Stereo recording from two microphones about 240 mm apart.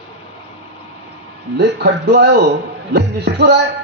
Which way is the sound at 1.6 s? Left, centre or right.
Right.